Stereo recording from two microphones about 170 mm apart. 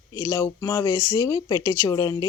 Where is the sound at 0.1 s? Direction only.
20° left (ahead or behind).